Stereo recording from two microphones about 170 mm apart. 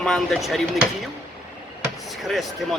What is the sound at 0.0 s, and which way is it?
Speech, 5° left (ahead or behind).